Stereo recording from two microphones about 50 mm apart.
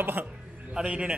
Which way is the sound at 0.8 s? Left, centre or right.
Right.